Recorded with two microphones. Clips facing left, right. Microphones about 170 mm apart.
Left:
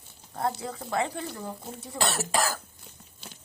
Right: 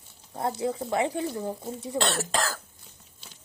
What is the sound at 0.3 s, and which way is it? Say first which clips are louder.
Speech: right 3 dB; 20° right (ahead or behind).